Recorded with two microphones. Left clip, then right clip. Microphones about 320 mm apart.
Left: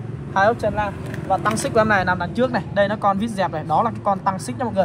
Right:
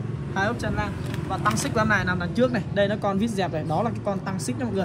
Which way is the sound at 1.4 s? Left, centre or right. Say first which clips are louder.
Left 3 dB; centre.